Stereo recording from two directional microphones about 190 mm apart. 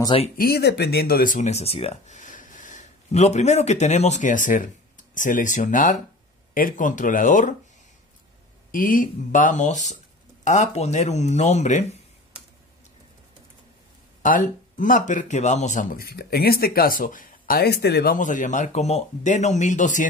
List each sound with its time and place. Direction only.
0.0 s speech: 25° left (ahead or behind)
0.4 s speech: 55° left (ahead or behind)
8.7 s speech: 45° left (ahead or behind)
14.2 s speech: 45° left (ahead or behind); by 18.1 s 60° left (ahead or behind)
18.1 s speech: 40° left (ahead or behind)